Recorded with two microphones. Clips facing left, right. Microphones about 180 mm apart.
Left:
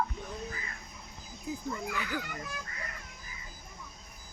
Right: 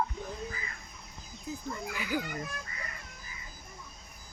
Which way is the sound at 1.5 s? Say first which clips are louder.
Left 2 dB; 15° left (ahead or behind).